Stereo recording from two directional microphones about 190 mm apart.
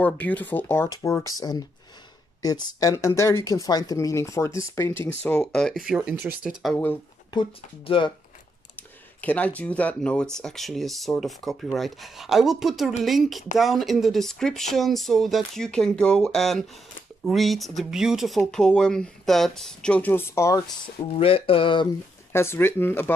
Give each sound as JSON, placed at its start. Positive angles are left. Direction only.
{"t": 0.0, "sound": "speech", "side_deg": 10}
{"t": 2.4, "sound": "speech", "side_deg": 20}
{"t": 6.6, "sound": "speech", "side_deg": 10}
{"t": 7.3, "sound": "speech", "side_deg": 25}
{"t": 8.7, "sound": "speech", "side_deg": 10}
{"t": 20.8, "sound": "speech", "side_deg": 30}
{"t": 22.3, "sound": "speech", "side_deg": 15}